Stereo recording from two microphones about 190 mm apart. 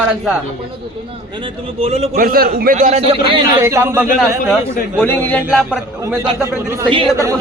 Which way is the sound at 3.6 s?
15° right (ahead or behind).